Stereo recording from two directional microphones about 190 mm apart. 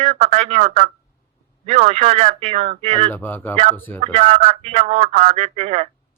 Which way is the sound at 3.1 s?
10° left (ahead or behind).